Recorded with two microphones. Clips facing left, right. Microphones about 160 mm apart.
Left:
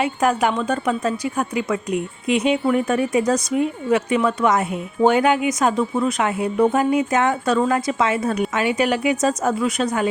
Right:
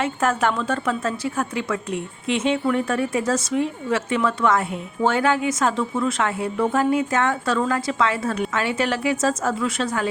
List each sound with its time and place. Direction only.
0.0 s a woman's voice: 15° left (ahead or behind)